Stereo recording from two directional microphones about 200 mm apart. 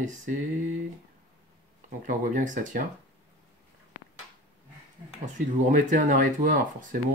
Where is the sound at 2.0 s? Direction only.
40° right (ahead or behind).